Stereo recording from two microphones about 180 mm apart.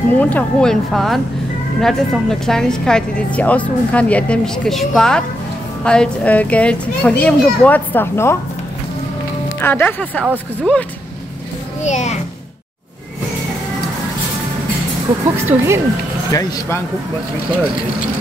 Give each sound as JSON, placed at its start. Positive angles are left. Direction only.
{"t": 0.2, "sound": "a woman's voice", "side_deg": 10}
{"t": 9.6, "sound": "a child's voice", "side_deg": 10}
{"t": 10.2, "sound": "speech", "side_deg": -10}
{"t": 11.8, "sound": "a child's voice", "side_deg": 40}
{"t": 15.3, "sound": "speech", "side_deg": -15}
{"t": 16.3, "sound": "speech", "side_deg": 20}